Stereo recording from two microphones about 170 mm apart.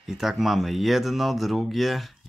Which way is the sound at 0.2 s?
Centre (ahead or behind).